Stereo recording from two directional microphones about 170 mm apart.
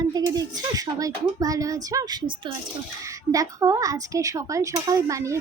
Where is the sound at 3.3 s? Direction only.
20° right (ahead or behind).